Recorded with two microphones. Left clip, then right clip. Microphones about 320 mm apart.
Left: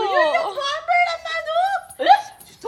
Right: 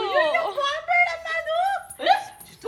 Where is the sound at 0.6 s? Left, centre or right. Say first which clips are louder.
Left 1 dB; left.